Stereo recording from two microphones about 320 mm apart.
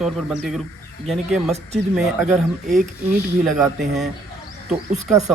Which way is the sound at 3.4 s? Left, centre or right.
Centre.